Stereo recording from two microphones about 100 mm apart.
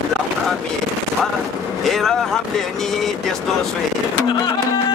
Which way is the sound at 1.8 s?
Centre (ahead or behind).